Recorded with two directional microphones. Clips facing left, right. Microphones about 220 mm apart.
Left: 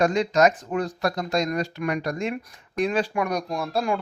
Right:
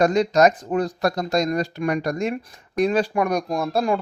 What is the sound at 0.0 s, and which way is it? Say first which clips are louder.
Speech: right 3 dB; 40° right (ahead or behind).